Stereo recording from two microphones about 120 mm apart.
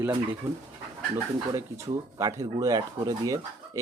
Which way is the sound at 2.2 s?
30° right (ahead or behind).